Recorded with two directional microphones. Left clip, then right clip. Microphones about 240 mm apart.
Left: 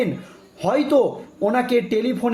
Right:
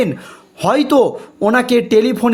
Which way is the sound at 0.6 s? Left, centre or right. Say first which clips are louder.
Right 5 dB; right.